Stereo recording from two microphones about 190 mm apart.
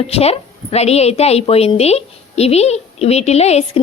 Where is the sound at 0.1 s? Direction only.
30° left (ahead or behind).